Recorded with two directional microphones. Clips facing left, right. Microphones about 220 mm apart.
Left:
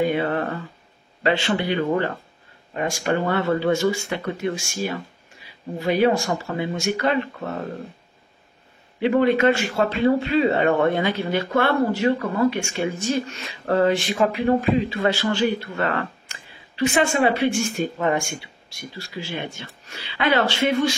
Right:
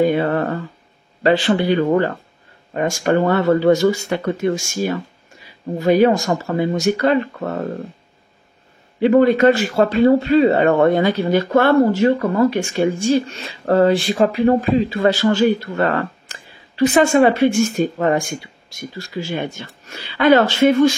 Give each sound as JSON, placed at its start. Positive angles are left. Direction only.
{"t": 0.0, "sound": "speech", "side_deg": -40}
{"t": 9.0, "sound": "speech", "side_deg": -40}